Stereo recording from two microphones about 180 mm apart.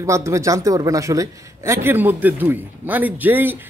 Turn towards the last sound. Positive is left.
turn(degrees=-10)  # may be behind; listen again after turning